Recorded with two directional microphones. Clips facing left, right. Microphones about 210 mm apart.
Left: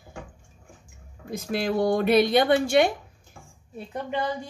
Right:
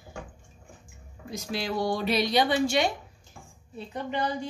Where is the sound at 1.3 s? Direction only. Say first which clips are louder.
Left 5 dB; 55° left (ahead or behind).